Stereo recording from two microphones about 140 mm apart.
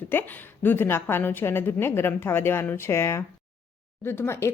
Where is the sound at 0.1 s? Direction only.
15° left (ahead or behind).